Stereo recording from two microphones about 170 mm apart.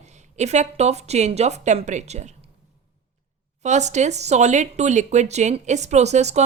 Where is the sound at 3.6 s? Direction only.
45° right (ahead or behind).